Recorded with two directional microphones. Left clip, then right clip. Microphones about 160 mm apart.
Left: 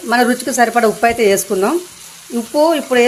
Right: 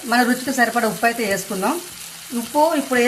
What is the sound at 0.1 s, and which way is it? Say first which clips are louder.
Speech: left 4 dB; 55° left (ahead or behind).